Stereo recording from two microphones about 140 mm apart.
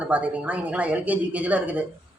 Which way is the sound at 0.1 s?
10° right (ahead or behind).